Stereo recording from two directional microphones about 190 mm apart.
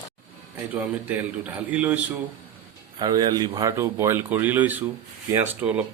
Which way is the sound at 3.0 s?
20° right (ahead or behind).